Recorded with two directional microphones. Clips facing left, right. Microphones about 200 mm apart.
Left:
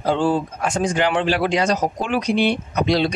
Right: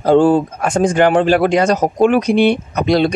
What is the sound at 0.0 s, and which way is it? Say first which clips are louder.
Speech: right 8 dB; 50° right (ahead or behind).